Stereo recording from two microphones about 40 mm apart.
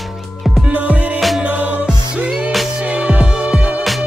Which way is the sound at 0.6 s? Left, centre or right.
Right.